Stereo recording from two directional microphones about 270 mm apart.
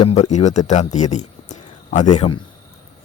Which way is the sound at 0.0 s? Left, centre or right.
Left.